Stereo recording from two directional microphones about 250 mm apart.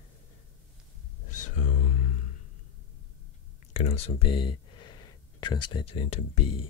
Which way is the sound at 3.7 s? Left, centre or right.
Left.